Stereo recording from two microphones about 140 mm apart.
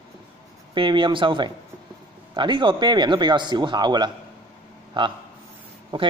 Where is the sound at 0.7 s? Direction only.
35° right (ahead or behind).